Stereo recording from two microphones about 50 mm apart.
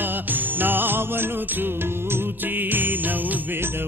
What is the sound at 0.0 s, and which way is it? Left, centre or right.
Music, right.